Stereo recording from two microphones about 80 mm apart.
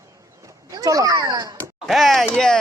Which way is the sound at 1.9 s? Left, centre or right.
Centre.